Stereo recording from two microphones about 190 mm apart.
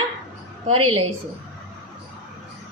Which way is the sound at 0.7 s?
30° right (ahead or behind).